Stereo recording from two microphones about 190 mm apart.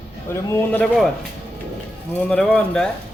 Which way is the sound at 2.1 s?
5° left (ahead or behind).